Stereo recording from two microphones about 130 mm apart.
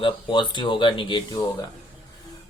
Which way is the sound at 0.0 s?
40° left (ahead or behind).